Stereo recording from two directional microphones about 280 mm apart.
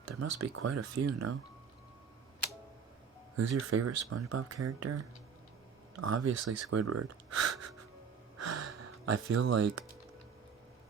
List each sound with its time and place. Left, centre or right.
0.2 s speech: right
3.6 s speech: right
6.3 s speech: right
8.4 s gasp: right
8.6 s speech: right